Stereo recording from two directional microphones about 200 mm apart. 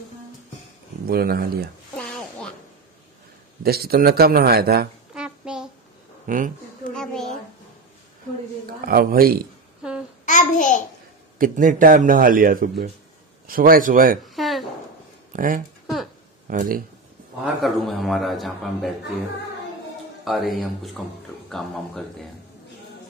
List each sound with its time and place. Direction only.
1.0 s speech: 50° right (ahead or behind)
2.0 s a sound: 5° left (ahead or behind)
3.6 s speech: 50° right (ahead or behind)
5.1 s a sound: 5° right (ahead or behind)
6.2 s speech: 40° right (ahead or behind)
6.9 s a sound: 5° left (ahead or behind)
8.8 s speech: 45° right (ahead or behind)
10.2 s babbling: 40° left (ahead or behind)
11.3 s speech: 45° right (ahead or behind)
14.3 s dishes: centre (ahead or behind)
15.3 s speech: 40° right (ahead or behind)
17.6 s speech: centre (ahead or behind)
20.2 s speech: centre (ahead or behind)